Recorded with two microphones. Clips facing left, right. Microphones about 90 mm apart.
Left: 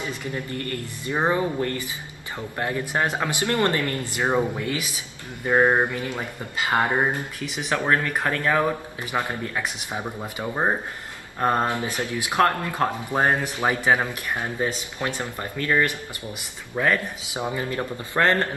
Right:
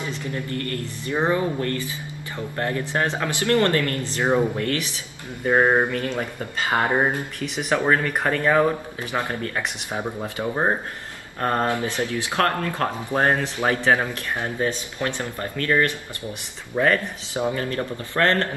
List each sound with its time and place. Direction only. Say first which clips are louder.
0.3 s speech: right 3 dB; 20° left (ahead or behind)
5.4 s a sound: right 1 dB; 15° right (ahead or behind)
5.9 s speech: right 3 dB; 15° left (ahead or behind)
6.7 s a sound: right 1 dB; 20° right (ahead or behind)
7.9 s speech: right 2 dB; 5° right (ahead or behind)
9.1 s speech: even; 10° left (ahead or behind)
10.4 s speech: right 1 dB; 5° right (ahead or behind)
11.3 s speech: even; 20° left (ahead or behind)
16.7 s speech: right 2 dB; centre (ahead or behind)
17.3 s speech: right 3 dB; 15° left (ahead or behind)